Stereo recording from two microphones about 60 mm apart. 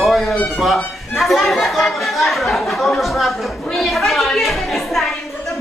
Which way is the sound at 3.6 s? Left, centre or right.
Centre.